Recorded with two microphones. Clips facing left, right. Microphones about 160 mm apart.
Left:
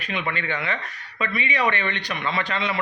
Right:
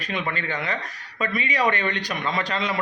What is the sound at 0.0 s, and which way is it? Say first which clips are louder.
A man's voice: even; 40° right (ahead or behind).